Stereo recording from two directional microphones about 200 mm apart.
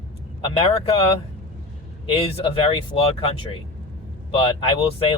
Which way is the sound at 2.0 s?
30° left (ahead or behind).